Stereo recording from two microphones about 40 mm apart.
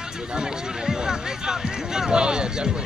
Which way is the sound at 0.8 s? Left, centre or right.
Centre.